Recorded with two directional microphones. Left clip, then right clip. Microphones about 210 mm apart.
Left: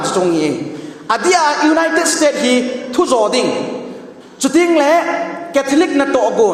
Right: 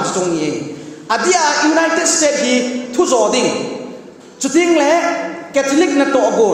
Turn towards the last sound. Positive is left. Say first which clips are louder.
# even
turn(degrees=20)  # may be behind; listen again after turning